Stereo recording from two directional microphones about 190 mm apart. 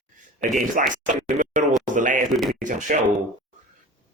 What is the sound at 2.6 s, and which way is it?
Speech, 40° right (ahead or behind).